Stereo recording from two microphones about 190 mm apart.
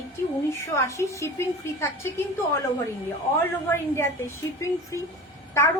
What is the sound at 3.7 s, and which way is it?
A woman's voice, 10° left (ahead or behind).